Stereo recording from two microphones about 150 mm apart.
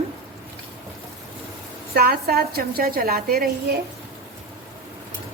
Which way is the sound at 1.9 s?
90° right.